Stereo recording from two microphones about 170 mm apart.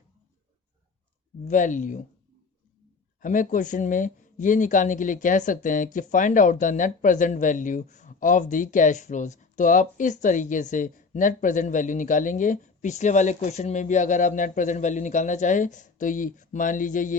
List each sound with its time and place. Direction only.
1.5 s speech: 50° left (ahead or behind)
3.2 s speech: 50° left (ahead or behind)